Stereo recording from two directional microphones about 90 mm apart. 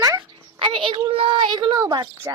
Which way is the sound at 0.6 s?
70° right (ahead or behind).